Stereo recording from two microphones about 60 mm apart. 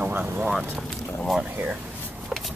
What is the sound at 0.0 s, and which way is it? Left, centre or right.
Speech, right.